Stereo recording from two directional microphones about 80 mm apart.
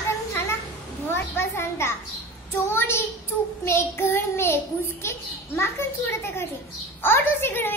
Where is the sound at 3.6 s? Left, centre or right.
Left.